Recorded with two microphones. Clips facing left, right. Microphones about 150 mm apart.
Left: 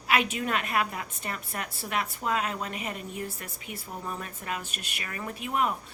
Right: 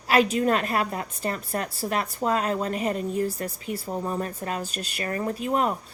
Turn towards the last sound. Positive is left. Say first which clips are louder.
# right 5 dB
turn(degrees=-35)  # may be behind; listen again after turning